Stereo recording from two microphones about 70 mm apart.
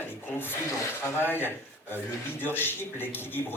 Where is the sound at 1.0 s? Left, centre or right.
Left.